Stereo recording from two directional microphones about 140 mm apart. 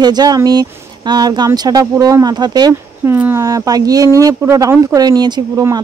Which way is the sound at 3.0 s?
15° right (ahead or behind).